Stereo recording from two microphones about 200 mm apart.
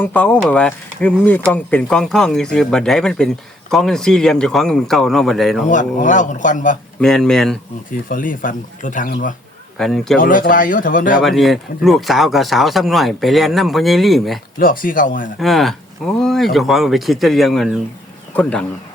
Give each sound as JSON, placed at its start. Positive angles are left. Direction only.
{"t": 0.0, "sound": "speech", "side_deg": 5}
{"t": 5.6, "sound": "a man's voice", "side_deg": 40}
{"t": 7.0, "sound": "speech", "side_deg": 0}
{"t": 8.1, "sound": "speech", "side_deg": 45}
{"t": 9.7, "sound": "speech", "side_deg": 0}
{"t": 10.2, "sound": "speech", "side_deg": 45}
{"t": 11.2, "sound": "speech", "side_deg": 0}
{"t": 14.6, "sound": "speech", "side_deg": 45}
{"t": 15.4, "sound": "speech", "side_deg": 0}